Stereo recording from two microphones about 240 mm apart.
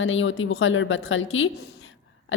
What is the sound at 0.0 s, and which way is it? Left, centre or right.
A woman's voice, left.